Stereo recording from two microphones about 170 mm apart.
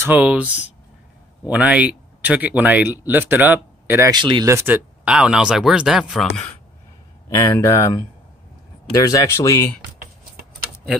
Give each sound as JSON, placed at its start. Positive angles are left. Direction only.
{"t": 0.0, "sound": "speech", "side_deg": -10}
{"t": 1.5, "sound": "speech", "side_deg": -10}
{"t": 4.1, "sound": "speech", "side_deg": -25}
{"t": 7.2, "sound": "speech", "side_deg": 20}